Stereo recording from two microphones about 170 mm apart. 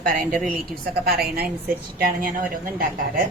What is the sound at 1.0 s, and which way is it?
Speech, 65° right (ahead or behind).